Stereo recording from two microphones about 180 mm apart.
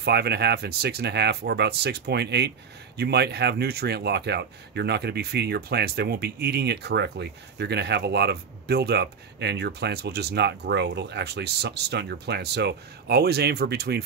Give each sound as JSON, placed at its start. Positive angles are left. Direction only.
{"t": 0.0, "sound": "speech", "side_deg": -65}